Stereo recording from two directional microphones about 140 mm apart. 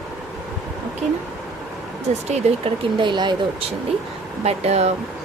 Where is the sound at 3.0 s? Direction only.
35° right (ahead or behind).